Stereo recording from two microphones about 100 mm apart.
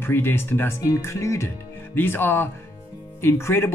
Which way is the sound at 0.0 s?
20° left (ahead or behind).